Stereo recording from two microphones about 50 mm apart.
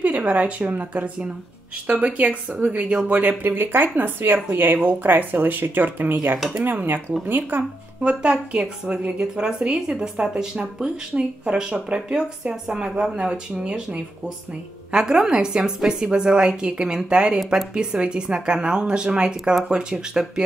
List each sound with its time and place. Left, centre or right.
0.0 s speech: right
3.2 s speech: right
8.0 s a woman's voice: centre